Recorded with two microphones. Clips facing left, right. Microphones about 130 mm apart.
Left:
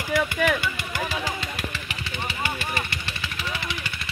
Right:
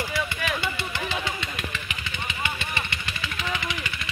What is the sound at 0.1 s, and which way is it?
Vehicle, 50° left (ahead or behind).